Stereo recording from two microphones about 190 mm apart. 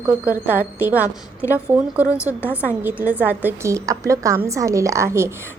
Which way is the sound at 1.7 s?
10° right (ahead or behind).